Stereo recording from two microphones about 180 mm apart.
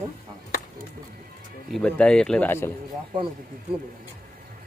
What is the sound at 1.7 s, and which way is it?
Speech, 5° left (ahead or behind).